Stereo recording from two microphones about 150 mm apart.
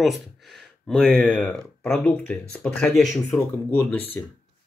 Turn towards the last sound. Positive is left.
turn(degrees=15)  # may be behind; listen again after turning